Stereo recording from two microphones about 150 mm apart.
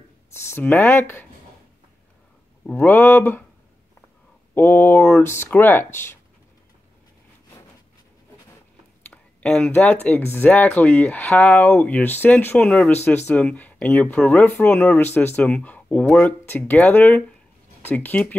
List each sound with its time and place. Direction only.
0.3 s speech: 15° left (ahead or behind)
2.6 s speech: 10° left (ahead or behind)
4.6 s speech: 15° left (ahead or behind)
9.1 s speech: 5° left (ahead or behind)
12.9 s speech: 15° left (ahead or behind)